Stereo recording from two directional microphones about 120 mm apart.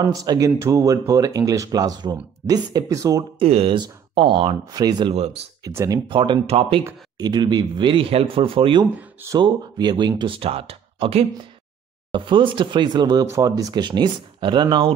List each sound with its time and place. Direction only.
0.1 s speech: 30° right (ahead or behind)
3.3 s speech: 55° right (ahead or behind)
3.7 s speech: 40° right (ahead or behind)
4.7 s speech: 35° right (ahead or behind)
6.0 s speech: 45° right (ahead or behind)
12.1 s speech: 40° right (ahead or behind)